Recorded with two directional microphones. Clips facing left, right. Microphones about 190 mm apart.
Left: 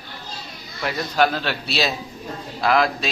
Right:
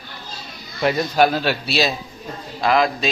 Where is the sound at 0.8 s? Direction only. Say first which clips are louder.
Right 4 dB; 20° right (ahead or behind).